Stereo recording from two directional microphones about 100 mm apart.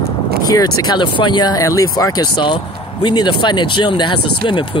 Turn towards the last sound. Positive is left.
turn(degrees=55)  # may be behind; listen again after turning